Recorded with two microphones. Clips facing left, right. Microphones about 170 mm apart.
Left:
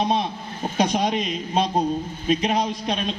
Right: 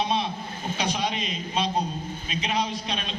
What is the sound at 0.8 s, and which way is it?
A man's voice, 50° left (ahead or behind).